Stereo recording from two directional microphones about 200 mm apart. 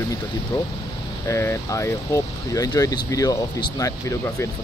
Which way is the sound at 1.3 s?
15° left (ahead or behind).